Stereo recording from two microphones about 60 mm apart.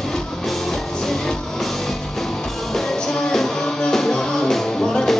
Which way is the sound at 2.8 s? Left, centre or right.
Centre.